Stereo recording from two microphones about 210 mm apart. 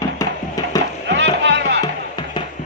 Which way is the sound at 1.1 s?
60° right (ahead or behind).